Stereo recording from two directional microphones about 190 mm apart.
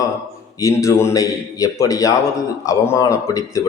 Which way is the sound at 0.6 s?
15° left (ahead or behind).